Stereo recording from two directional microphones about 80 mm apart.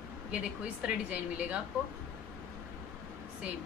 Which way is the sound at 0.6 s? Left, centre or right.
Centre.